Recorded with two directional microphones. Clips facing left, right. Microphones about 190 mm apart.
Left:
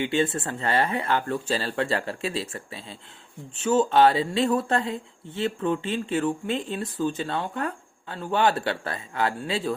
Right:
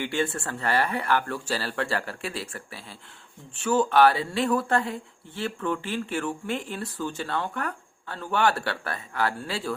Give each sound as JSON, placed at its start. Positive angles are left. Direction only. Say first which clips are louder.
{"t": 0.0, "sound": "speech", "louder": "left 3 dB", "side_deg": 20}